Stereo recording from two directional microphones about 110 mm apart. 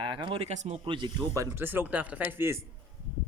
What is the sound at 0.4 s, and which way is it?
Speech, 85° right.